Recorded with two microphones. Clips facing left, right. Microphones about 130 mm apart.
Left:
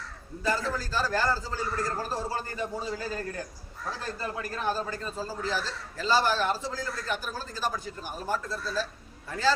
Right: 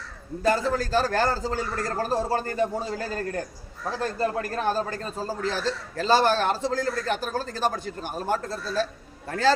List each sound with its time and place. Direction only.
0.7 s a man's voice: 65° right (ahead or behind)